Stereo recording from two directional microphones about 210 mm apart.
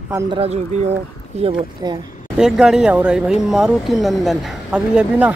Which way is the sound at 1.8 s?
15° right (ahead or behind).